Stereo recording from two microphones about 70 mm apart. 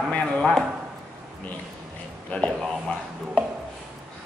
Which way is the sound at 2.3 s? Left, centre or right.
Left.